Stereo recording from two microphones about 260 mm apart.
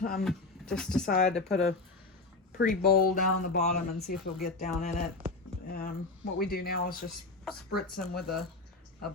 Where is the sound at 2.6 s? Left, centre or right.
Left.